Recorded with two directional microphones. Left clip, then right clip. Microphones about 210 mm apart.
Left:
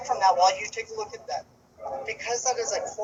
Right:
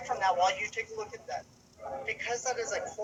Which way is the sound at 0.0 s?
5° left (ahead or behind).